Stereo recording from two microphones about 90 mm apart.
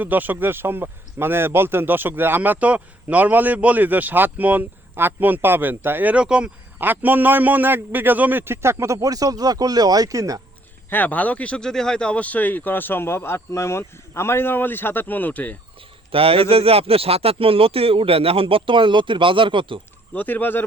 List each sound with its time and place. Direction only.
0.0 s a man's voice: 20° right (ahead or behind); by 10.4 s 40° right (ahead or behind)
10.8 s speech: 20° left (ahead or behind)
16.1 s speech: 90° right; by 19.8 s 70° right (ahead or behind)
20.1 s speech: 20° left (ahead or behind)